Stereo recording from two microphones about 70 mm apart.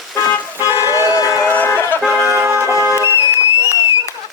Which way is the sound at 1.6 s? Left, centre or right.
Left.